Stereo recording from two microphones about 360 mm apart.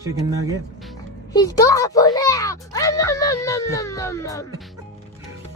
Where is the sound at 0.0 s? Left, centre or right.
Centre.